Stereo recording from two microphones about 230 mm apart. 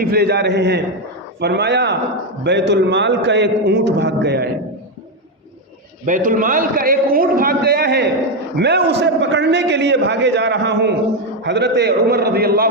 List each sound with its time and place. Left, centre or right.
0.0 s a man's voice: right
6.1 s a man's voice: right